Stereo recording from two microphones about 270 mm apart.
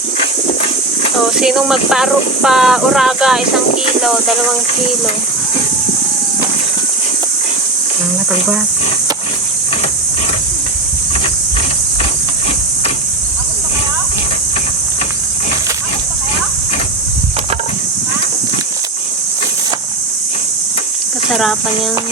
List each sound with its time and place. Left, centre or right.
1.4 s speech: centre